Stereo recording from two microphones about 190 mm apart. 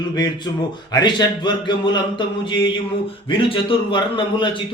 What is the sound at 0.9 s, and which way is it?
A man's voice, 25° left (ahead or behind).